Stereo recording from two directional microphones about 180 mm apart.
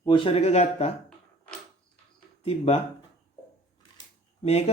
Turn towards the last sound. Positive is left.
turn(degrees=35)  # may be behind; listen again after turning